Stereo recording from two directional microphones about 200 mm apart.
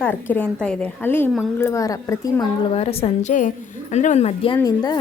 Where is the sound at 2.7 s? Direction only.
30° left (ahead or behind).